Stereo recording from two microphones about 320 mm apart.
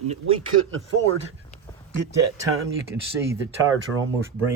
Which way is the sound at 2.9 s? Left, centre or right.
Centre.